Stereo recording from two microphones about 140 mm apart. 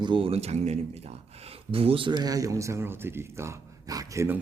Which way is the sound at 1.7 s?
40° right (ahead or behind).